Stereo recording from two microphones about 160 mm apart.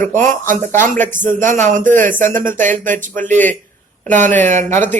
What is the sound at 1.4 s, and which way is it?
Speech, 50° right (ahead or behind).